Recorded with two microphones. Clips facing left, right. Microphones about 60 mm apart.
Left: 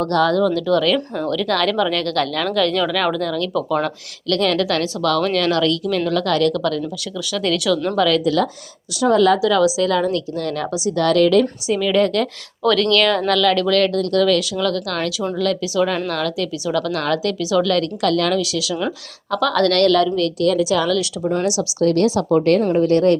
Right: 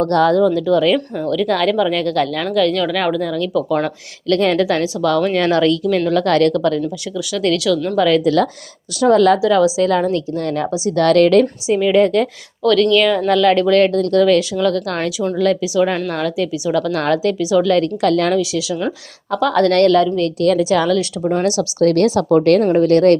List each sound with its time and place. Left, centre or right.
0.0 s a woman's voice: right; by 3.9 s centre
4.3 s a woman's voice: right
7.3 s speech: centre
7.9 s a woman's voice: right
8.2 s a woman's voice: right
9.4 s a woman's voice: right
10.9 s a woman's voice: right
11.7 s a woman's voice: right
12.6 s speech: centre
13.4 s a woman's voice: right
20.4 s a woman's voice: right
21.8 s a woman's voice: right